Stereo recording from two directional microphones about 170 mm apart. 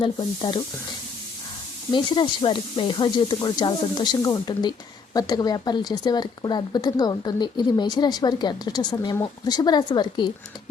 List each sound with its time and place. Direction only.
0.0 s speech: 30° left (ahead or behind)
1.9 s speech: 25° left (ahead or behind)